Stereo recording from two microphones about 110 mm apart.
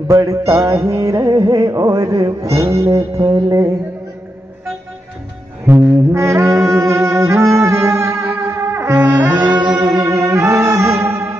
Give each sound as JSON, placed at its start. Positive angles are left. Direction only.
{"t": 0.1, "sound": "music", "side_deg": -30}
{"t": 5.7, "sound": "music", "side_deg": -25}
{"t": 9.7, "sound": "music", "side_deg": -35}